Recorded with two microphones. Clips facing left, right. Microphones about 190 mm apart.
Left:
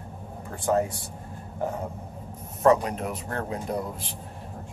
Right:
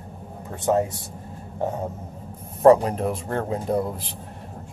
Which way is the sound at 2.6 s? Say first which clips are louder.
Right 6 dB; 30° right (ahead or behind).